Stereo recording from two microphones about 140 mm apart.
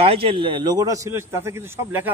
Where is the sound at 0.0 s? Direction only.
40° right (ahead or behind).